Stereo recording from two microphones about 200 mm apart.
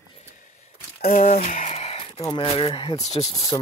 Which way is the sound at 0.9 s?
30° left (ahead or behind).